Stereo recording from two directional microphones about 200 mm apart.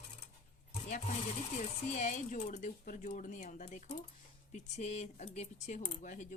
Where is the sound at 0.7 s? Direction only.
40° left (ahead or behind).